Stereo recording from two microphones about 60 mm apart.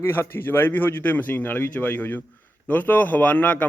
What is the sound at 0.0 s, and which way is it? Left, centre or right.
A man's voice, left.